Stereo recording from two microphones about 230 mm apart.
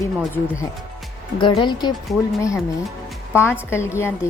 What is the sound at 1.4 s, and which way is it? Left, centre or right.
Speech, left.